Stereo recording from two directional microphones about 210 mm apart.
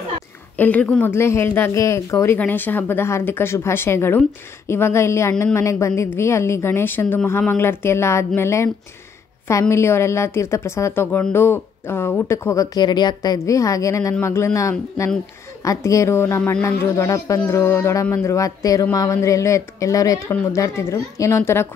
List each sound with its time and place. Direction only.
0.6 s a woman's voice: 5° left (ahead or behind)